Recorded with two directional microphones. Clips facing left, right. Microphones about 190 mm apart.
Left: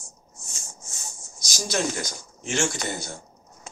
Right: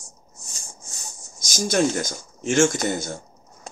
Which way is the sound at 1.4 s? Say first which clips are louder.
Right 6 dB; 50° right (ahead or behind).